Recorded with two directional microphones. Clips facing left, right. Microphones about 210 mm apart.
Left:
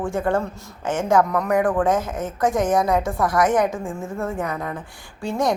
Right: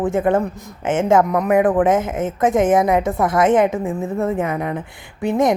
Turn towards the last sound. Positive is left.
turn(degrees=-20)  # may be behind; listen again after turning